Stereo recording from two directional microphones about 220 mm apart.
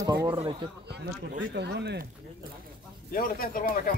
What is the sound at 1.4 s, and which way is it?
Speech, 50° right (ahead or behind).